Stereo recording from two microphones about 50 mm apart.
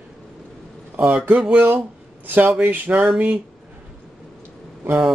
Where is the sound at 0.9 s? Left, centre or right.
Right.